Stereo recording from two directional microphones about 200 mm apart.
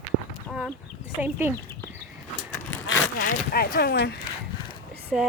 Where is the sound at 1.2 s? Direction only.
10° right (ahead or behind).